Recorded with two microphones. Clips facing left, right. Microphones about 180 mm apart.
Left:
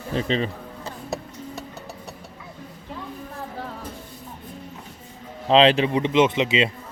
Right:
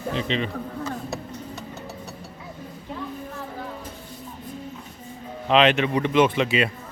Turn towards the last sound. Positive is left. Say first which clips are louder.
# left 1 dB
turn(degrees=20)  # may be behind; listen again after turning